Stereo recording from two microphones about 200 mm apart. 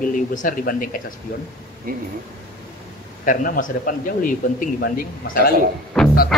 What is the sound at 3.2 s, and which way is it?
A man's voice, 40° left (ahead or behind).